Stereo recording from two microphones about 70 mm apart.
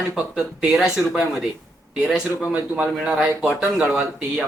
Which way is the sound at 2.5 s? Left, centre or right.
Right.